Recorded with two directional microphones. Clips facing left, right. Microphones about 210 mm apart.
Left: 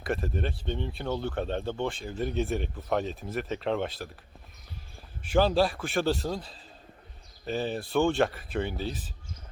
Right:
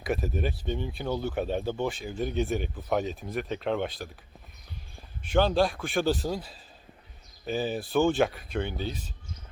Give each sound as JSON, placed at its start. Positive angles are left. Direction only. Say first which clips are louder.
{"t": 0.0, "sound": "speech", "louder": "right 1 dB", "side_deg": -5}
{"t": 5.3, "sound": "speech", "louder": "even", "side_deg": 5}